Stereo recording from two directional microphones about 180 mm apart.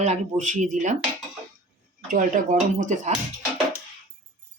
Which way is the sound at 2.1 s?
45° right (ahead or behind).